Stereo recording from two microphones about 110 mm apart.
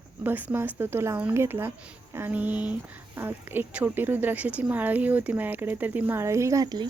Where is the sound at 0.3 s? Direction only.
15° right (ahead or behind).